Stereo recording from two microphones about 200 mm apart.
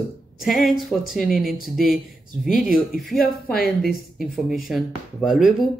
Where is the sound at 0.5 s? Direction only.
Centre (ahead or behind).